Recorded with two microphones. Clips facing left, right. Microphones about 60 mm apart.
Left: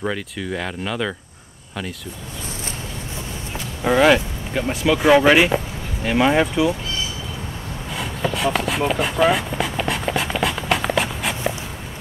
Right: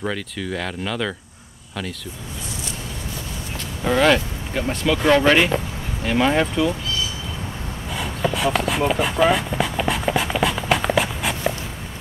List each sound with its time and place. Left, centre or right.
0.0 s speech: centre
3.8 s speech: centre
7.9 s a sound: centre